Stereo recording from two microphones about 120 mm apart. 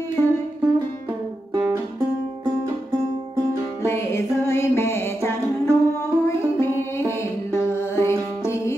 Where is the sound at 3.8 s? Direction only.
20° left (ahead or behind).